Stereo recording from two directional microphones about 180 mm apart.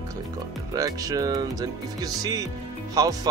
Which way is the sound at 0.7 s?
20° right (ahead or behind).